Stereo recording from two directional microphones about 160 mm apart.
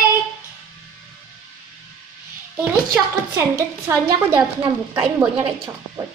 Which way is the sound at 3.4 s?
15° right (ahead or behind).